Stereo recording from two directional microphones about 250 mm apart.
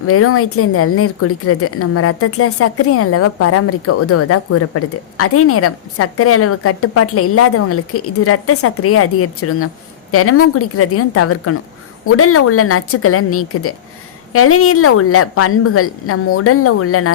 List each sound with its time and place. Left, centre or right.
0.0 s a woman's voice: left